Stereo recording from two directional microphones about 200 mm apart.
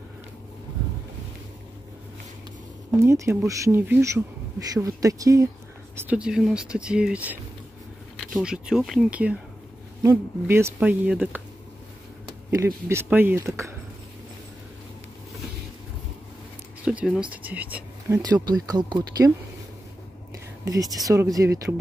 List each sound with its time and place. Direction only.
3.0 s speech: 15° right (ahead or behind)
8.4 s speech: 5° right (ahead or behind)
12.4 s speech: 10° right (ahead or behind)
16.8 s speech: 5° right (ahead or behind)
18.2 s speech: 20° right (ahead or behind)
20.6 s speech: 15° right (ahead or behind)